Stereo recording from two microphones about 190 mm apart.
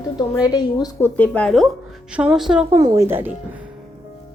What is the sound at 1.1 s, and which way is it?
Speech, 5° left (ahead or behind).